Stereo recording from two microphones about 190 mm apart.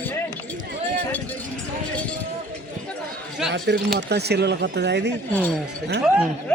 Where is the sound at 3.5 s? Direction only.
55° right (ahead or behind).